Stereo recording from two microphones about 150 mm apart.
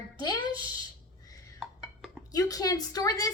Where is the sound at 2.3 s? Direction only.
25° left (ahead or behind).